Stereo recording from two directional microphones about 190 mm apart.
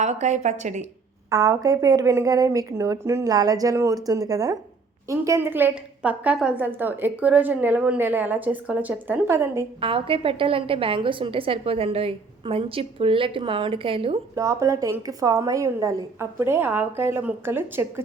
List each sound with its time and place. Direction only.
0.0 s a woman's voice: 40° right (ahead or behind)
1.3 s a woman's voice: 20° right (ahead or behind)
9.8 s a woman's voice: 30° right (ahead or behind)
14.3 s a woman's voice: 15° right (ahead or behind)